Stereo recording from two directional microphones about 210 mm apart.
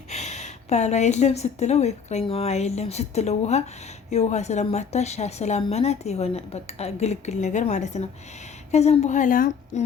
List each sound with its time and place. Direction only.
0.1 s a woman's voice: 35° left (ahead or behind)